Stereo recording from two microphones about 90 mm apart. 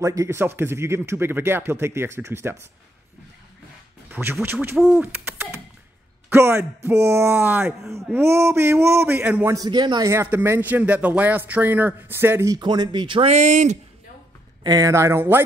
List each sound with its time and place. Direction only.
0.0 s speech: 35° right (ahead or behind)
0.4 s a man's voice: 25° right (ahead or behind)
4.1 s a man's voice: 25° right (ahead or behind)
4.8 s owl: 25° right (ahead or behind)
6.3 s a man's voice: 30° right (ahead or behind)
9.7 s speech: 55° right (ahead or behind)
10.2 s a man's voice: 25° right (ahead or behind)
12.4 s speech: 50° right (ahead or behind)
14.6 s speech: 45° right (ahead or behind); by 15.4 s 25° right (ahead or behind)